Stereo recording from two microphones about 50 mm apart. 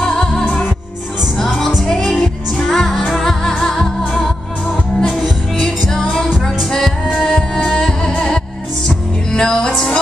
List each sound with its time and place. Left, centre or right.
0.0 s music: centre
6.4 s music: centre